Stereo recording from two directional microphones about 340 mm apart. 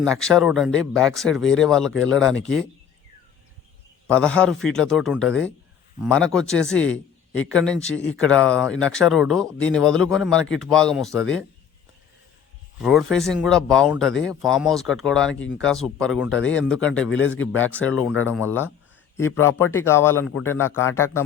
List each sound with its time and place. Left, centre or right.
0.0 s speech: centre
4.0 s speech: centre
12.8 s speech: centre
17.2 s speech: left
17.6 s speech: centre
19.1 s speech: centre